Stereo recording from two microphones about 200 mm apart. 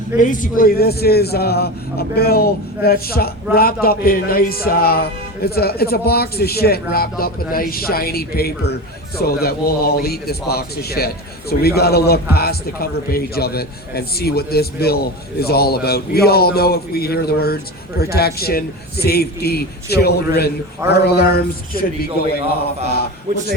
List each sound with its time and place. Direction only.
0.2 s a man's voice: 40° left (ahead or behind)